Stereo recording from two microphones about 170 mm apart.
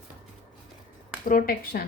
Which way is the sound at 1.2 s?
55° left (ahead or behind).